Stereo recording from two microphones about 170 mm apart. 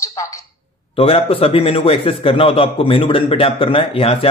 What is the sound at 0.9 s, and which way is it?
A man's voice, 35° left (ahead or behind).